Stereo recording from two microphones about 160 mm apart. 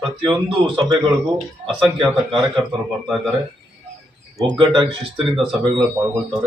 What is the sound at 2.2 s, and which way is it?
Speech, 30° right (ahead or behind).